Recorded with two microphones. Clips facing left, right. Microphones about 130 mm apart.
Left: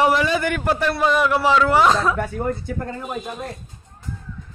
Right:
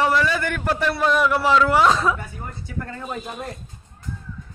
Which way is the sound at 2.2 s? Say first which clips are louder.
Left 12 dB; 55° left (ahead or behind).